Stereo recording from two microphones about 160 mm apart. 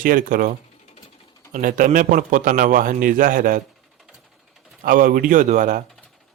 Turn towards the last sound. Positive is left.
turn(degrees=-55)  # may be behind; listen again after turning